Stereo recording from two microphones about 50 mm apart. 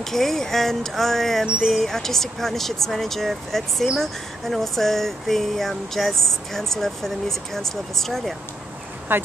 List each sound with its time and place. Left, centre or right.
0.0 s speech: centre
1.4 s speech: centre
1.7 s speech: centre
9.1 s speech: right